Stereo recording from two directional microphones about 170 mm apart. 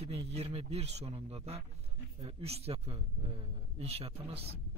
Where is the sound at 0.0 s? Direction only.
35° right (ahead or behind).